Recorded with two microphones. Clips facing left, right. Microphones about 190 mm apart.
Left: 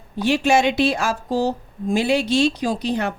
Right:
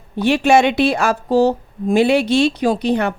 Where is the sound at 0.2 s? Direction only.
60° right (ahead or behind).